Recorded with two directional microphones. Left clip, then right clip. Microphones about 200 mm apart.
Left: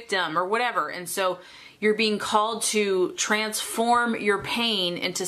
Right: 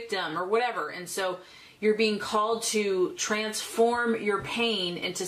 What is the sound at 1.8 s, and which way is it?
Speech, 30° left (ahead or behind).